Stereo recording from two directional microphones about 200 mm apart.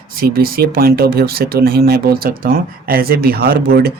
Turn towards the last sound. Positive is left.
turn(degrees=-50)  # may be behind; listen again after turning